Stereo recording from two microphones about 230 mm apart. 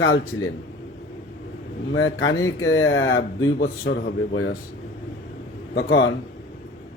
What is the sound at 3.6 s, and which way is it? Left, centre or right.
Speech, left.